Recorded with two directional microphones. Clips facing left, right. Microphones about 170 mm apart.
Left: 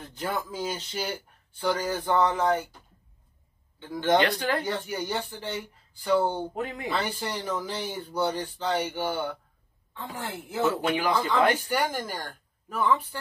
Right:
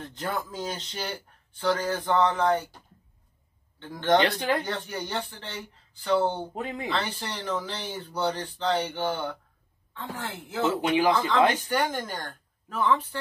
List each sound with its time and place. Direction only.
0.0 s speech: 5° left (ahead or behind)
3.8 s speech: 10° left (ahead or behind)
4.2 s speech: 25° right (ahead or behind)
4.6 s speech: 10° left (ahead or behind)